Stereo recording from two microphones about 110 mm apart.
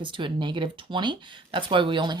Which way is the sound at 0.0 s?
45° right (ahead or behind).